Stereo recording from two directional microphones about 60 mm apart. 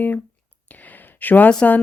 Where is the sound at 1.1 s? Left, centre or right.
Left.